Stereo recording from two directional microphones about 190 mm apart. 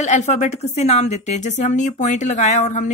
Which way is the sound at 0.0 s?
35° left (ahead or behind).